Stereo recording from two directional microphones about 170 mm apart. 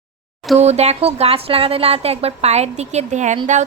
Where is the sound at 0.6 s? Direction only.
40° right (ahead or behind).